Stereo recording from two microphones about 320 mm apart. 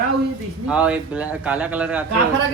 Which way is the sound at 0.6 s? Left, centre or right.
Centre.